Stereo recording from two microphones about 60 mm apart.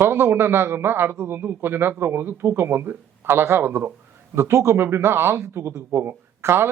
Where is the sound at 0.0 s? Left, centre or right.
Right.